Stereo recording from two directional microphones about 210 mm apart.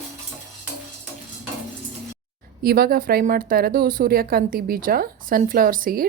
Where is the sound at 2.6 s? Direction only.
45° right (ahead or behind).